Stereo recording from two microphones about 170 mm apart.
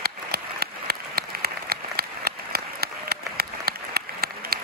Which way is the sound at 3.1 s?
65° right (ahead or behind).